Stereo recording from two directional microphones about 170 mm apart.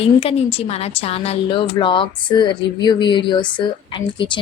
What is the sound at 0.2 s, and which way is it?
A woman's voice, 35° left (ahead or behind).